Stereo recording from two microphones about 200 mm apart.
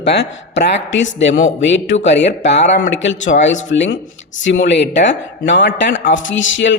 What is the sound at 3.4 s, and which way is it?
A man's voice, 65° left (ahead or behind).